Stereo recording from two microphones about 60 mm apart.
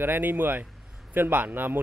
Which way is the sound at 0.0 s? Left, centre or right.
Right.